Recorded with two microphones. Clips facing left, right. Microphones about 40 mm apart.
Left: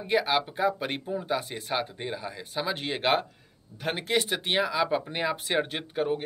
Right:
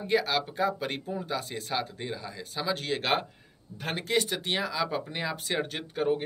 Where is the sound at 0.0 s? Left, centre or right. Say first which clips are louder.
Left 2 dB; centre.